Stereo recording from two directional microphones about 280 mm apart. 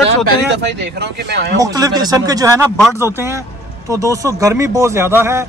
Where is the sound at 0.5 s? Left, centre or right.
Right.